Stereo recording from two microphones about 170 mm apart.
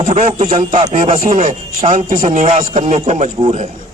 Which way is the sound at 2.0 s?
55° right (ahead or behind).